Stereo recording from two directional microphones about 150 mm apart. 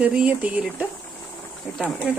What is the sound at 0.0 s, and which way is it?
Speech, 5° right (ahead or behind).